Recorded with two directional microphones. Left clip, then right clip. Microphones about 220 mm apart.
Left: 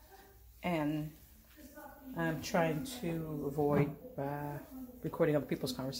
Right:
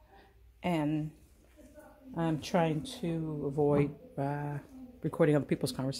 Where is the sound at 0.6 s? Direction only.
45° right (ahead or behind).